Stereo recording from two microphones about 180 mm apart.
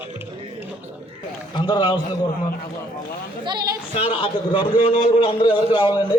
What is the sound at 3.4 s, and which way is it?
Speech, 20° right (ahead or behind).